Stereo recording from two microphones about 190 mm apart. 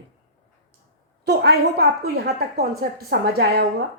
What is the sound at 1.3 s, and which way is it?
A woman's voice, 60° right (ahead or behind).